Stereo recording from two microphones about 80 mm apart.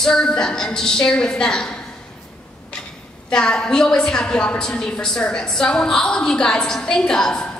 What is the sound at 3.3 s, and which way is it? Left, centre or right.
A woman's voice, centre.